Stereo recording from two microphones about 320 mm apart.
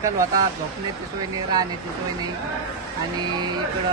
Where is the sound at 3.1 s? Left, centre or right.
Centre.